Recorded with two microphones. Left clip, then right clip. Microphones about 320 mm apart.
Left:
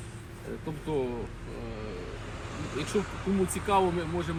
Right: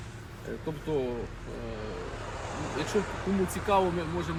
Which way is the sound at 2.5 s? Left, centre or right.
Right.